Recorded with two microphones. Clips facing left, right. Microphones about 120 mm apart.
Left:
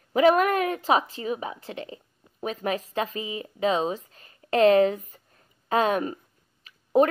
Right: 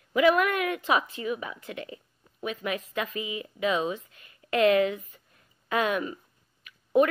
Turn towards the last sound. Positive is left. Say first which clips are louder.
# left 2 dB
turn(degrees=35)  # may be behind; listen again after turning